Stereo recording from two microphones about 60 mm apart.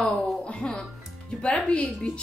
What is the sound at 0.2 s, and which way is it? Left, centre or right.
Music, centre.